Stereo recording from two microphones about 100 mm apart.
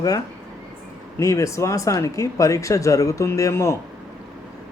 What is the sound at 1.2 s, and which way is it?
Speech, 30° left (ahead or behind).